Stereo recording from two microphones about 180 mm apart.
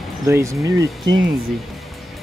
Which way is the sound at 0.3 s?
15° right (ahead or behind).